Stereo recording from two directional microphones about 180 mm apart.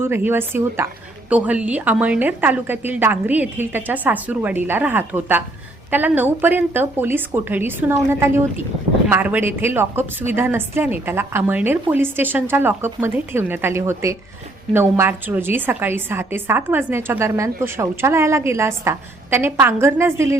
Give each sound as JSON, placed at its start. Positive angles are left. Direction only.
{"t": 0.0, "sound": "a woman's voice", "side_deg": -10}